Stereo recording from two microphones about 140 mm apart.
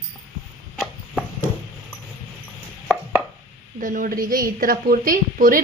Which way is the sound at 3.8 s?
75° right (ahead or behind).